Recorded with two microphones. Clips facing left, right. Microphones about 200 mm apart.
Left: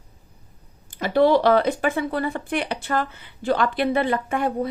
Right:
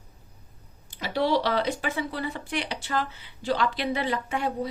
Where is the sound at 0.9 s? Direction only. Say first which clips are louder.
Left 7 dB; 50° left (ahead or behind).